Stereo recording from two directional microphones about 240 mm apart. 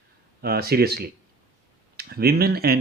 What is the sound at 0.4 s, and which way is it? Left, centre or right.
Speech, right.